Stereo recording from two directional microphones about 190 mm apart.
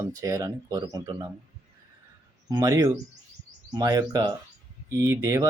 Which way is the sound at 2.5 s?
20° right (ahead or behind).